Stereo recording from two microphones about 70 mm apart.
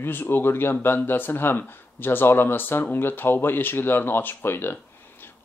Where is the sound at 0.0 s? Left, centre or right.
Left.